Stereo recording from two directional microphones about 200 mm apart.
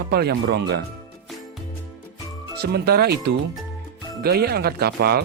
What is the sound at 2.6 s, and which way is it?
Speech, 50° right (ahead or behind).